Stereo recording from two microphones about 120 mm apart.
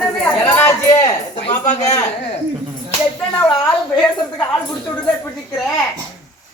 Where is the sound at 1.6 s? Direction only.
70° left (ahead or behind).